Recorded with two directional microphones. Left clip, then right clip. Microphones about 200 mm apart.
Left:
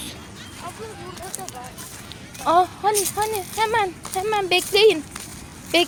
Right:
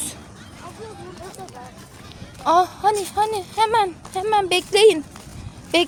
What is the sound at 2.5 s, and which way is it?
Speech, 10° right (ahead or behind).